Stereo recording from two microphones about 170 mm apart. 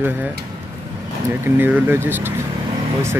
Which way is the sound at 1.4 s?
10° right (ahead or behind).